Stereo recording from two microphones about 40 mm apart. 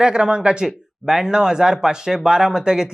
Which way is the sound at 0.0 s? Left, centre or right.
Right.